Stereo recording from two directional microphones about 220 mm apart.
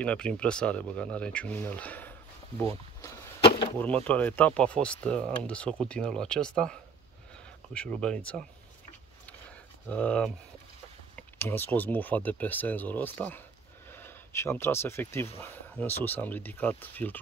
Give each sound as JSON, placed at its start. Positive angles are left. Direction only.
{"t": 0.0, "sound": "speech", "side_deg": 5}
{"t": 3.0, "sound": "a sound", "side_deg": 20}
{"t": 3.8, "sound": "speech", "side_deg": 5}
{"t": 9.8, "sound": "speech", "side_deg": 5}